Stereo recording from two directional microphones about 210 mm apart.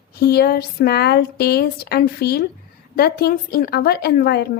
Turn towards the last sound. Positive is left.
turn(degrees=50)  # may be behind; listen again after turning